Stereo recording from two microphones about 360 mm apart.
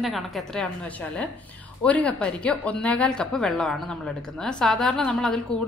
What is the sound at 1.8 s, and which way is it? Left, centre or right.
A woman's voice, centre.